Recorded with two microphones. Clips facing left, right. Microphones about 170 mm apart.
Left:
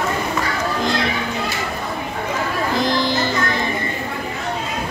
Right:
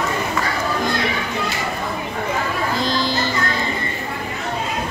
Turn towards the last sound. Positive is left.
turn(degrees=20)  # may be behind; listen again after turning